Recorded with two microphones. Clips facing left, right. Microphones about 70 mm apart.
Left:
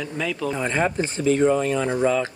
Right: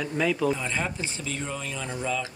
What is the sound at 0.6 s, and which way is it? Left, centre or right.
Speech, left.